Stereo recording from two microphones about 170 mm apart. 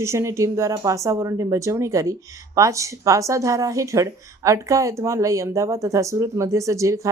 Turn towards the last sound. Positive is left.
turn(degrees=-20)  # may be behind; listen again after turning